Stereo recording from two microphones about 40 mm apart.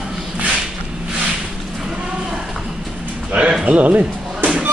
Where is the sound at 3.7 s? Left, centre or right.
Right.